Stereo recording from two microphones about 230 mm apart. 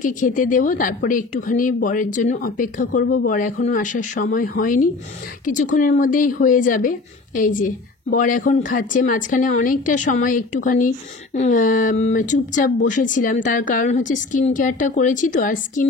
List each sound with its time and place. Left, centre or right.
0.0 s a woman's voice: left